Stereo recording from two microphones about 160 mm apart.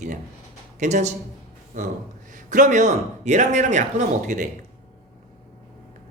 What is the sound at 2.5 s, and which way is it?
Speech, 55° right (ahead or behind).